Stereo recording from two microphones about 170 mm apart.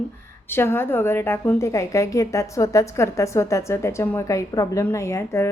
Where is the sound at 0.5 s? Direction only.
15° left (ahead or behind).